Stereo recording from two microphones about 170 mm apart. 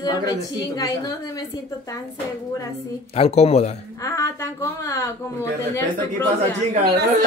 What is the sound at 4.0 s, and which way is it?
A woman's voice, 15° left (ahead or behind).